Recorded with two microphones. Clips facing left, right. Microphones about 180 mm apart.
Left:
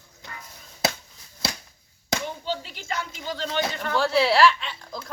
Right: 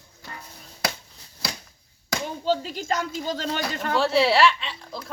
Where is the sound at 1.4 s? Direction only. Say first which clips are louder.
Left 2 dB; 25° left (ahead or behind).